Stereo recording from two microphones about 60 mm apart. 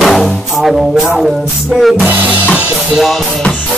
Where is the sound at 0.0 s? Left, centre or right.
Centre.